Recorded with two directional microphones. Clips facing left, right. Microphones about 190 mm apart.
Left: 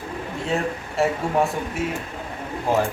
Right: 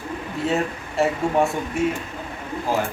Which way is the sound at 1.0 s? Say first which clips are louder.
Even; centre (ahead or behind).